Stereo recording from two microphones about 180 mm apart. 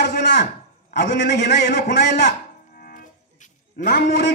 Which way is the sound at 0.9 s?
70° left (ahead or behind).